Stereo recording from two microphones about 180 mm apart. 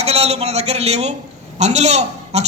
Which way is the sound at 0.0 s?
35° right (ahead or behind).